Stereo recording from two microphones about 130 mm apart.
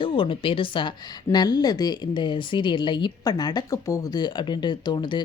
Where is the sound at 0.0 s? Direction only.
45° left (ahead or behind).